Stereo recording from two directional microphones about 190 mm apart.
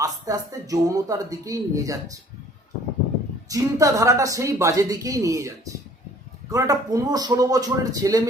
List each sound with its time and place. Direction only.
0.0 s speech: 20° right (ahead or behind)
3.5 s speech: 15° right (ahead or behind)